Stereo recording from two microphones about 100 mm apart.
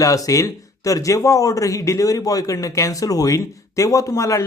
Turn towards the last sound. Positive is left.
turn(degrees=35)  # may be behind; listen again after turning